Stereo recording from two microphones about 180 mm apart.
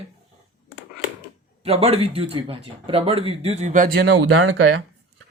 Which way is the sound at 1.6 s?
35° right (ahead or behind).